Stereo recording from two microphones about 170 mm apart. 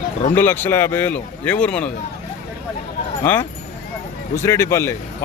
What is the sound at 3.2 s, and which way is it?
A man's voice, 10° left (ahead or behind).